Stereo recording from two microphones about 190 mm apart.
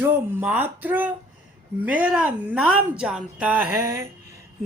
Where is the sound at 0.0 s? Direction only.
10° right (ahead or behind).